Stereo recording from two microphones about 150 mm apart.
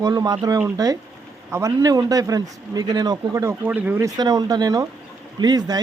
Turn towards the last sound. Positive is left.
turn(degrees=-25)  # may be behind; listen again after turning